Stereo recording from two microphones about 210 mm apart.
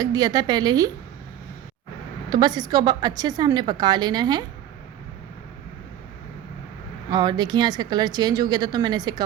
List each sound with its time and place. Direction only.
0.0 s a woman's voice: 15° right (ahead or behind)
2.3 s a woman's voice: 20° right (ahead or behind)
7.1 s a woman's voice: 20° right (ahead or behind)